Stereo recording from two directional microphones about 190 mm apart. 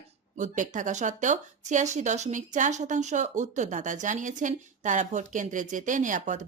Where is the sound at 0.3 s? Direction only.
40° right (ahead or behind).